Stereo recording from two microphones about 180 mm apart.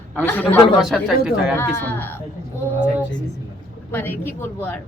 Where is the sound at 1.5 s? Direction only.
10° left (ahead or behind).